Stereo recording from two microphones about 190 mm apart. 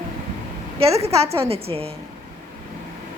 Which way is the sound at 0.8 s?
30° right (ahead or behind).